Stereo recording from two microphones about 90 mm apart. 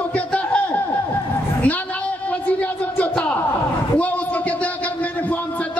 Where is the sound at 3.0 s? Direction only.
15° left (ahead or behind).